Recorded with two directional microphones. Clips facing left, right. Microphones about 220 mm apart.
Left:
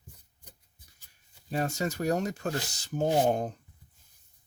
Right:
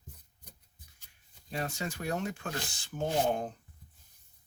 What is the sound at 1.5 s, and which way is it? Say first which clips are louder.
Speech: left 6 dB; 40° left (ahead or behind).